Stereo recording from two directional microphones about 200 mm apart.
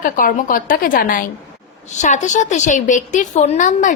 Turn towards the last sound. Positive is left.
turn(degrees=40)  # may be behind; listen again after turning